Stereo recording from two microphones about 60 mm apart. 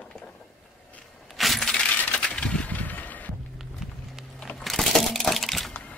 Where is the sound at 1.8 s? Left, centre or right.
Left.